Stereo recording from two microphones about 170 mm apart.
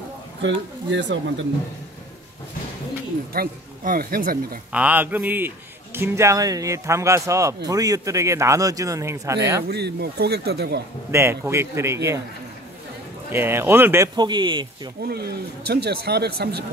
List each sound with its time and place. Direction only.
0.4 s speech: 90° right
3.3 s speech: 60° right (ahead or behind)
4.7 s speech: 10° right (ahead or behind)
9.7 s speech: 75° right (ahead or behind)
11.1 s speech: 15° right (ahead or behind)
13.3 s speech: 15° right (ahead or behind)
15.0 s speech: 70° right (ahead or behind)